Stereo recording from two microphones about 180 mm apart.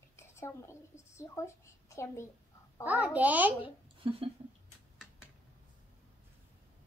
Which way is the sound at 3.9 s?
30° right (ahead or behind).